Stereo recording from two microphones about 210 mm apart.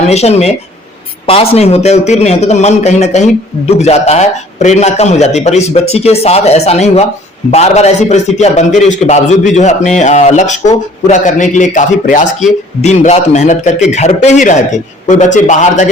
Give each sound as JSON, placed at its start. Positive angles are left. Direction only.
{"t": 0.1, "sound": "a man's voice", "side_deg": 30}
{"t": 1.5, "sound": "a man's voice", "side_deg": 30}